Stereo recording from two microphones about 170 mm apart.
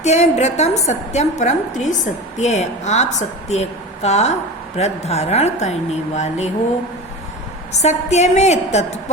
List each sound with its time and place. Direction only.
0.0 s a woman's voice: 40° left (ahead or behind)
7.7 s a woman's voice: 40° left (ahead or behind)